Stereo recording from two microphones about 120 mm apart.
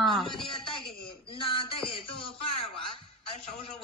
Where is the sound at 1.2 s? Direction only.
45° left (ahead or behind).